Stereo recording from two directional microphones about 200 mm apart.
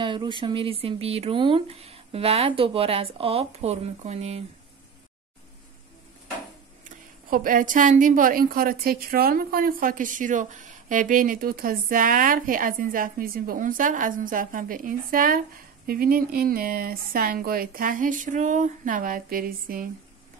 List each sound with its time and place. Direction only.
0.0 s speech: 25° right (ahead or behind)
7.2 s a woman's voice: 45° right (ahead or behind)